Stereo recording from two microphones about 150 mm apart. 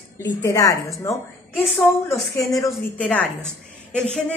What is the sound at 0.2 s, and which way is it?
Speech, 20° left (ahead or behind).